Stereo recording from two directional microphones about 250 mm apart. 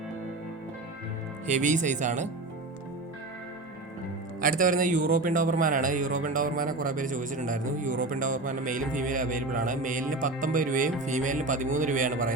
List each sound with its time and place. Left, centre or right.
1.5 s speech: right
4.4 s a man's voice: right